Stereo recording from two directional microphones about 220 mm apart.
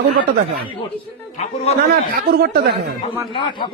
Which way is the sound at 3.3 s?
20° left (ahead or behind).